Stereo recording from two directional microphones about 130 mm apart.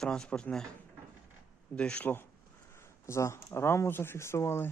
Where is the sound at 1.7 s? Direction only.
10° left (ahead or behind).